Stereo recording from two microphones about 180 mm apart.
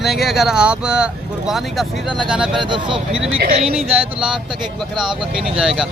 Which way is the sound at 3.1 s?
5° right (ahead or behind).